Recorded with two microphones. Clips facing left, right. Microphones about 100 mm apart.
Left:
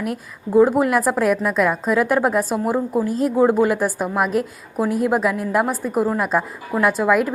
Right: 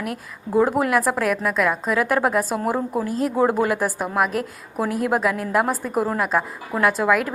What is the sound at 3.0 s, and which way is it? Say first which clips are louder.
Speech: left 3 dB; 30° left (ahead or behind).